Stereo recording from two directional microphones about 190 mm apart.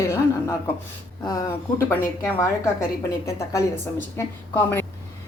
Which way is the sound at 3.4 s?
15° left (ahead or behind).